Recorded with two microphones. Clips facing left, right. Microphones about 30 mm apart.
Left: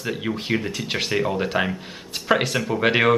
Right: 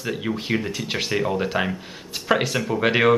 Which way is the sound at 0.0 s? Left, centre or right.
Centre.